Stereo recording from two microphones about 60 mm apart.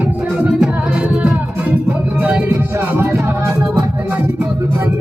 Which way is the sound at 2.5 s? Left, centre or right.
Right.